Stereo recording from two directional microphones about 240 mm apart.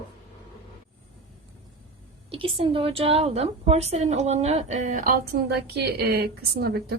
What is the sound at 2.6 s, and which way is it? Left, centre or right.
A woman's voice, right.